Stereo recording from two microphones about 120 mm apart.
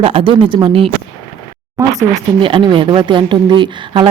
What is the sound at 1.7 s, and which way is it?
Speech, 30° right (ahead or behind).